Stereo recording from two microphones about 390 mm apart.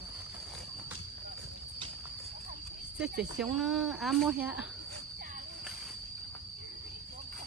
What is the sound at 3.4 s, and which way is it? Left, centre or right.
Speech, centre.